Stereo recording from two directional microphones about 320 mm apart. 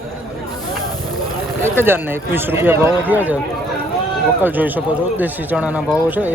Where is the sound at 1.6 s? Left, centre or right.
Centre.